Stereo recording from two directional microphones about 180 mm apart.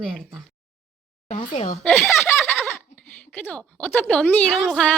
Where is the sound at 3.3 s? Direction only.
10° left (ahead or behind).